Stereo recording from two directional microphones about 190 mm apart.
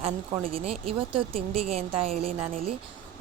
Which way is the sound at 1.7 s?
30° right (ahead or behind).